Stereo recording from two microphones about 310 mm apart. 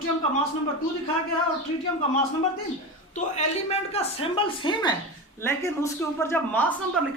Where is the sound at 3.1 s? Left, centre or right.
Left.